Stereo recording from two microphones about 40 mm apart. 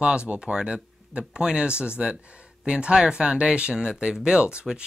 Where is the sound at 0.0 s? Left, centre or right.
Right.